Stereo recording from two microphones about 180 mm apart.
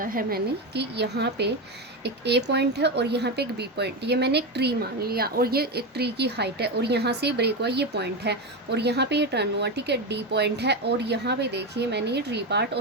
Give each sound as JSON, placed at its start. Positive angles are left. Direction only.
{"t": 0.0, "sound": "speech", "side_deg": -50}